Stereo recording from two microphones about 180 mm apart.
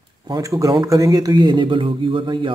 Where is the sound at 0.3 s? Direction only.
20° right (ahead or behind).